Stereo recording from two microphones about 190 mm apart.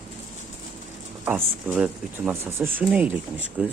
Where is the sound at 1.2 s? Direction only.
10° right (ahead or behind).